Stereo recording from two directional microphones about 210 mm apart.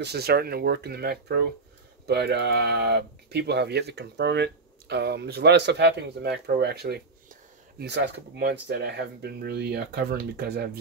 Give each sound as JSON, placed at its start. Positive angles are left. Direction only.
{"t": 0.0, "sound": "speech", "side_deg": -50}